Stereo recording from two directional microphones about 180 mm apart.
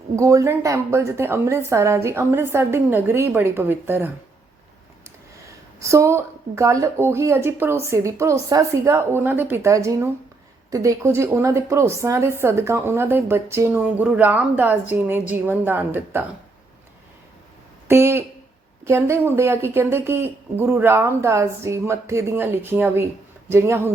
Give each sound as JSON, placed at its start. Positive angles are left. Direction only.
{"t": 0.2, "sound": "a woman's voice", "side_deg": -15}
{"t": 5.8, "sound": "a woman's voice", "side_deg": -15}
{"t": 17.8, "sound": "a woman's voice", "side_deg": -15}